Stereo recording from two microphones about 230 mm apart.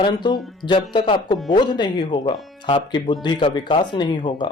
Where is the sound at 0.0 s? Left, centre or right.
Centre.